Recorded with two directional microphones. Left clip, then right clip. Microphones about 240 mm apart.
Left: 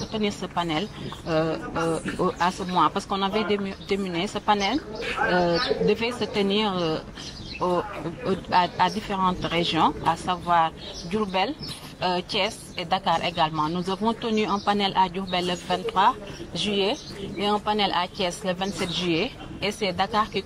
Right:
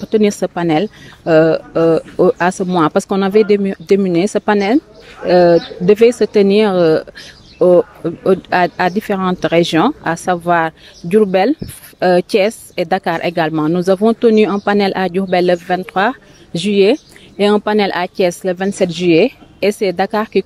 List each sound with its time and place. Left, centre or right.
0.1 s speech: right